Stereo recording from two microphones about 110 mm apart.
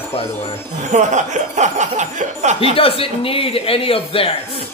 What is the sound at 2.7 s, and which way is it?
Speech, 55° left (ahead or behind).